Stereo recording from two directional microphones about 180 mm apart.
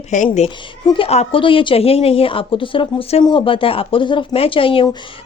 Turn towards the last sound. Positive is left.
turn(degrees=30)  # may be behind; listen again after turning